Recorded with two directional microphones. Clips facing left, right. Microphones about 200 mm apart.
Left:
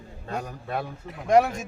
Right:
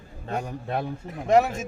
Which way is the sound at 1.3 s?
5° right (ahead or behind).